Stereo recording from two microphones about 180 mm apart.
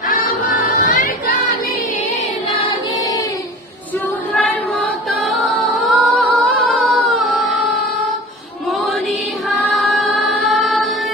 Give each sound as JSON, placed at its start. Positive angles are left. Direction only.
{"t": 0.1, "sound": "music", "side_deg": 50}
{"t": 4.3, "sound": "music", "side_deg": 0}
{"t": 9.8, "sound": "choir", "side_deg": 0}